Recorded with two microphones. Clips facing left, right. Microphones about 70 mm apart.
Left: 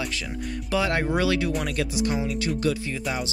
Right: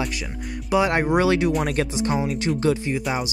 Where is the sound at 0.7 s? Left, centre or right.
Right.